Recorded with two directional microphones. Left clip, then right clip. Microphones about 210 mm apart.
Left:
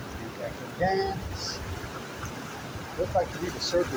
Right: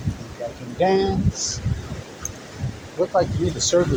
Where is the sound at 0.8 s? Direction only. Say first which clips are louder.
Right 7 dB; 50° right (ahead or behind).